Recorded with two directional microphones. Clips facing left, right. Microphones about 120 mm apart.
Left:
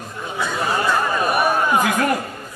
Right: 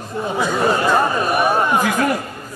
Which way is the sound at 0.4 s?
30° right (ahead or behind).